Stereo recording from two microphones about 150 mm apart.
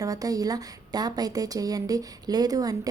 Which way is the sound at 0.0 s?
25° right (ahead or behind).